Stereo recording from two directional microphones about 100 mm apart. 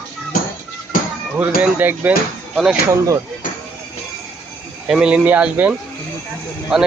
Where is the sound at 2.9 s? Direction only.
35° right (ahead or behind).